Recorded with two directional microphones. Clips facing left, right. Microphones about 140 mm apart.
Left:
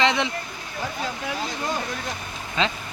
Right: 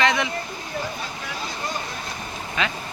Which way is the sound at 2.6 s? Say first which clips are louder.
Left 2 dB; 25° left (ahead or behind).